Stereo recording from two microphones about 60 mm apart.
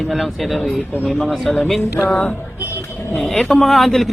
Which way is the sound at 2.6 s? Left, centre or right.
Left.